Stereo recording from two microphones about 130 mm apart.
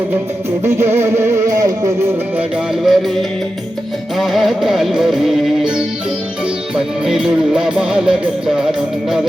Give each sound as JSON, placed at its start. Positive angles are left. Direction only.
{"t": 0.6, "sound": "music", "side_deg": -20}
{"t": 2.8, "sound": "music", "side_deg": 0}